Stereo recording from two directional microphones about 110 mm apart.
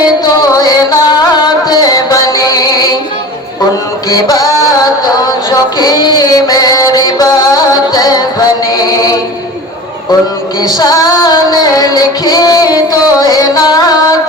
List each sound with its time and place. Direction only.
0.0 s music: 35° left (ahead or behind)
4.1 s music: 35° left (ahead or behind)
10.6 s female singing: 35° left (ahead or behind)